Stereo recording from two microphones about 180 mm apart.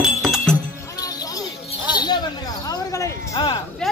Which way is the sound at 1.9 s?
25° left (ahead or behind).